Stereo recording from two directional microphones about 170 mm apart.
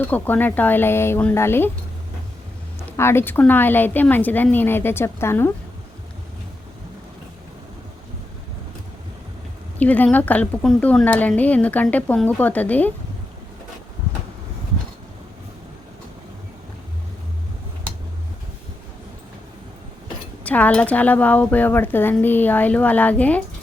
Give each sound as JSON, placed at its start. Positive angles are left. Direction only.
{"t": 0.0, "sound": "speech", "side_deg": 10}
{"t": 2.9, "sound": "speech", "side_deg": 15}
{"t": 9.7, "sound": "speech", "side_deg": 10}
{"t": 20.4, "sound": "speech", "side_deg": 10}